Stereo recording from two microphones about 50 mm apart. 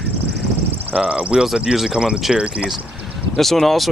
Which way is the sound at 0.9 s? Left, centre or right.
Right.